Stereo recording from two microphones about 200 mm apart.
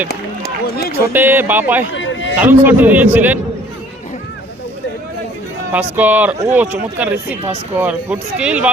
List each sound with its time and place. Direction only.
0.1 s run: 55° left (ahead or behind)
1.1 s speech: 10° right (ahead or behind)
5.7 s speech: 10° right (ahead or behind)